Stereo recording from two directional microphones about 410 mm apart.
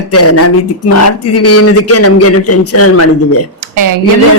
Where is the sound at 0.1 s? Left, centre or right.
Left.